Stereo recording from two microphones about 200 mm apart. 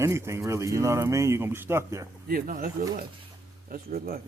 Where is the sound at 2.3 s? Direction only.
45° right (ahead or behind).